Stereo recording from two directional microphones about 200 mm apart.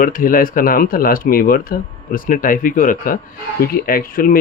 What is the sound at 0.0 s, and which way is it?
Speech, 45° left (ahead or behind).